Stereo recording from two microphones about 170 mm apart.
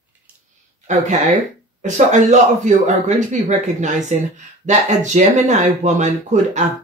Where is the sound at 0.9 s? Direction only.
45° right (ahead or behind).